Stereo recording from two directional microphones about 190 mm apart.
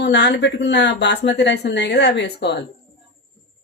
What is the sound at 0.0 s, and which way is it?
Speech, 65° left (ahead or behind).